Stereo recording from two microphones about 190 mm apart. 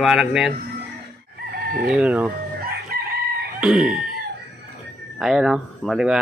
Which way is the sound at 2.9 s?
50° right (ahead or behind).